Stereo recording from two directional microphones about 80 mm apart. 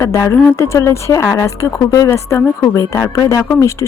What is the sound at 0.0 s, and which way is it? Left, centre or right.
Speech, left.